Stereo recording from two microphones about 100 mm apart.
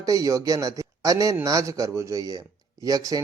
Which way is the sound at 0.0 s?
35° right (ahead or behind).